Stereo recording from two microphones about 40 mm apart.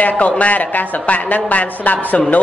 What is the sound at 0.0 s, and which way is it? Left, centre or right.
Speech, left.